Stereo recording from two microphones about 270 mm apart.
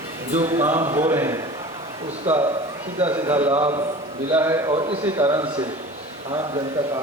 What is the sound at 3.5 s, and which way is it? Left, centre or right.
Speech, right.